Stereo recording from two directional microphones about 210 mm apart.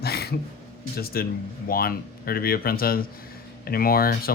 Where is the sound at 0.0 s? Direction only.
50° left (ahead or behind).